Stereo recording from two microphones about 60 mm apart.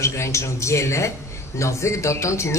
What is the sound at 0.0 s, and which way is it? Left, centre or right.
A woman's voice, left.